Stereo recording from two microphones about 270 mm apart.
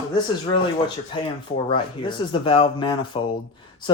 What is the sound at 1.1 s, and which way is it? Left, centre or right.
Speech, centre.